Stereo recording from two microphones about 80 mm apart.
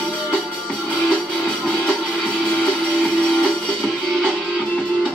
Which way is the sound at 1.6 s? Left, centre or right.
Centre.